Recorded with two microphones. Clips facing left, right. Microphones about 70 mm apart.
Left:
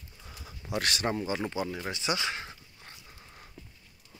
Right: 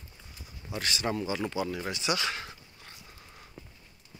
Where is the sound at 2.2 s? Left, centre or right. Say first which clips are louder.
Even; left.